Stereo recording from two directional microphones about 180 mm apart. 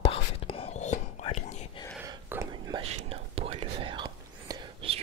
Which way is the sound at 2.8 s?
30° right (ahead or behind).